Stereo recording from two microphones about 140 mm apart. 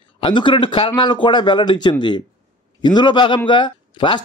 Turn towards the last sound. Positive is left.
turn(degrees=35)  # may be behind; listen again after turning